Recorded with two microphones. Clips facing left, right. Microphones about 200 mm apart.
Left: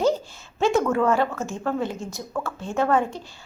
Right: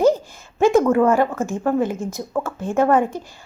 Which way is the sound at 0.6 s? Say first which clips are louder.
Right 6 dB; 15° right (ahead or behind).